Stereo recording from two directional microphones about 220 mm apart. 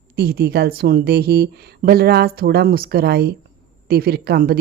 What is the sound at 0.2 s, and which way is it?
Speech, 45° right (ahead or behind).